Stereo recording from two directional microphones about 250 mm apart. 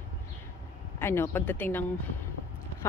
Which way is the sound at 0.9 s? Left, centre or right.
Centre.